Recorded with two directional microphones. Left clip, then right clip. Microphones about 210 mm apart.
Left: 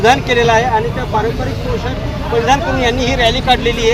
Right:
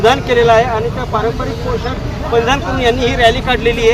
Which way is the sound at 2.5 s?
Centre (ahead or behind).